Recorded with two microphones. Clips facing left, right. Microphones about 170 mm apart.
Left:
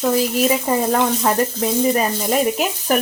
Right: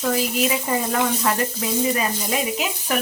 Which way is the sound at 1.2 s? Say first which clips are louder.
Left 5 dB; 45° left (ahead or behind).